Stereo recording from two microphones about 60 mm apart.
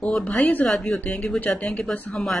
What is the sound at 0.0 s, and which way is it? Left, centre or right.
Speech, centre.